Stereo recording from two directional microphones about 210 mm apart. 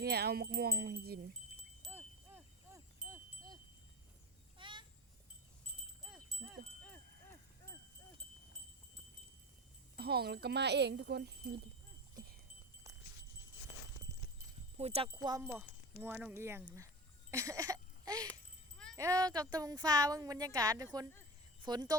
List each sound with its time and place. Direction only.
0.0 s speech: 50° right (ahead or behind)
1.8 s chime: 10° right (ahead or behind)
4.5 s a sound: 25° right (ahead or behind)
6.1 s wind chime: centre (ahead or behind)
9.9 s speech: 50° right (ahead or behind)
14.1 s clip-clop: 35° right (ahead or behind)
14.8 s speech: 30° right (ahead or behind)